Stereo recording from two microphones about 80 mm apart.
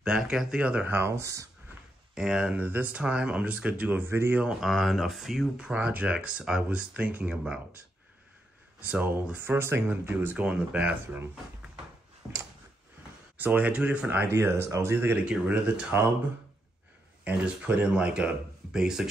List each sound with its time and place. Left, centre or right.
0.0 s speech: centre
0.9 s speech: right
2.1 s speech: centre
2.6 s speech: right
4.6 s speech: centre
8.8 s speech: centre
9.6 s speech: right
13.4 s speech: centre
14.2 s speech: right
15.2 s speech: centre
17.2 s speech: centre